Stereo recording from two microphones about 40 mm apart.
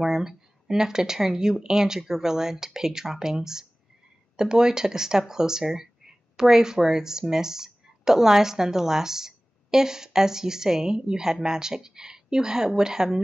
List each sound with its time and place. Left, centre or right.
0.0 s speech: centre